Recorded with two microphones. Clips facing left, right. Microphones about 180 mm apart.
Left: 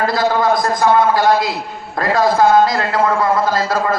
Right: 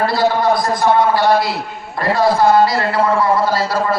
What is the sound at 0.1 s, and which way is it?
A man's voice, 45° left (ahead or behind).